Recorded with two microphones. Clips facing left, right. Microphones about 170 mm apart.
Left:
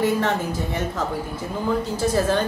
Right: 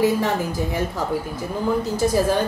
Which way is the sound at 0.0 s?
10° right (ahead or behind).